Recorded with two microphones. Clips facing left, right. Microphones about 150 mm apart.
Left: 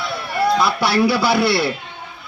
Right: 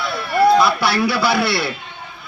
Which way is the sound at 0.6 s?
40° left (ahead or behind).